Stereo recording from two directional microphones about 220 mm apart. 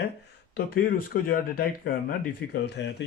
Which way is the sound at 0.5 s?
40° left (ahead or behind).